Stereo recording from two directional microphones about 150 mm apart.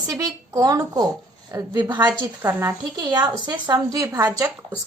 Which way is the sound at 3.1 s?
30° right (ahead or behind).